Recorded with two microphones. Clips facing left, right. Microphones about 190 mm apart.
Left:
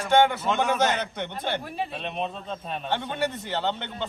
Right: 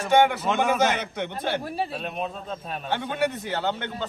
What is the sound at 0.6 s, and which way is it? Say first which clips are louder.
A man's voice: right 2 dB; 5° right (ahead or behind).